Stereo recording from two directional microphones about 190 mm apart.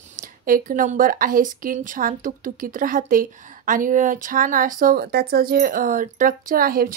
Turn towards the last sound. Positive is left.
turn(degrees=-50)  # may be behind; listen again after turning